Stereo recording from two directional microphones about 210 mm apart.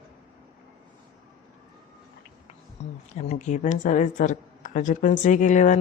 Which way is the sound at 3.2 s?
35° left (ahead or behind).